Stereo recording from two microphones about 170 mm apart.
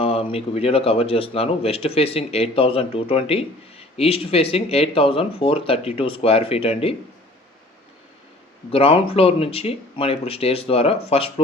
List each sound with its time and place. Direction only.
0.0 s speech: 35° left (ahead or behind)
8.7 s speech: 35° left (ahead or behind)